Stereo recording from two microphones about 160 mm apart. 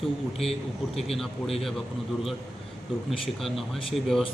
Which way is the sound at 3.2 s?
Centre (ahead or behind).